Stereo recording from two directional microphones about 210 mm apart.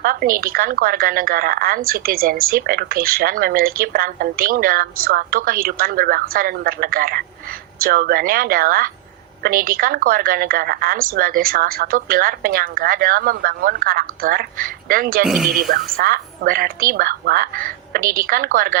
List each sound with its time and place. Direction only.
0.0 s a woman's voice: 45° right (ahead or behind)
15.3 s speech: centre (ahead or behind)
15.5 s a woman's voice: 45° right (ahead or behind)